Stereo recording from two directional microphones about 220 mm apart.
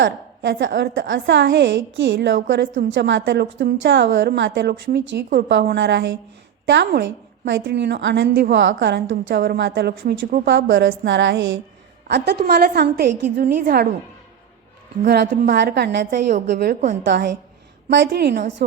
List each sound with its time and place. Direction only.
0.0 s a woman's voice: 55° right (ahead or behind)
15.0 s a woman's voice: 50° right (ahead or behind)